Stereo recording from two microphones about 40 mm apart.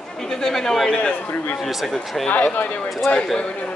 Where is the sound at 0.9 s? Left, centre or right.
Left.